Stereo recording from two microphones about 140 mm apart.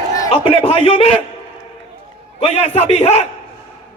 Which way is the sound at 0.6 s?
40° left (ahead or behind).